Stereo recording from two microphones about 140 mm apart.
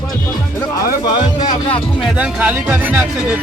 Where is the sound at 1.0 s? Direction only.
30° left (ahead or behind).